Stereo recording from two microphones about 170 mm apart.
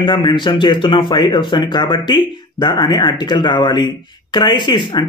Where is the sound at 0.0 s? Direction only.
25° left (ahead or behind).